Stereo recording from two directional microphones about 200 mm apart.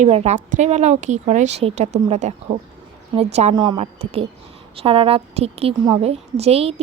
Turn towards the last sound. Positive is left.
turn(degrees=-30)  # may be behind; listen again after turning